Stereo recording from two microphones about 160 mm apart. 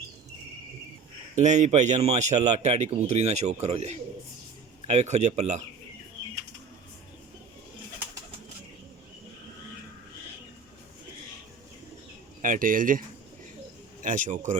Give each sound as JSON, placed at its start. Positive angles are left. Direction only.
{"t": 1.4, "sound": "speech", "side_deg": -45}
{"t": 12.4, "sound": "speech", "side_deg": -60}
{"t": 14.0, "sound": "speech", "side_deg": -55}